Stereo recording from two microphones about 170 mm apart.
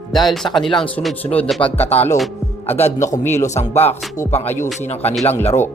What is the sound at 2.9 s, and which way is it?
Speech, 45° left (ahead or behind).